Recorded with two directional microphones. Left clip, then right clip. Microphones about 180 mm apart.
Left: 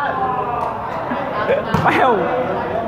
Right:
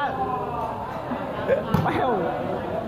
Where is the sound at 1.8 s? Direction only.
25° left (ahead or behind).